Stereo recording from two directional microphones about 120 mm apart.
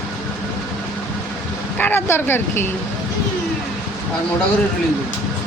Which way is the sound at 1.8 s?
20° left (ahead or behind).